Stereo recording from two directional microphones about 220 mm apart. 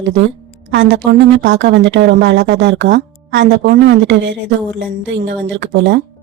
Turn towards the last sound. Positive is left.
turn(degrees=-55)  # may be behind; listen again after turning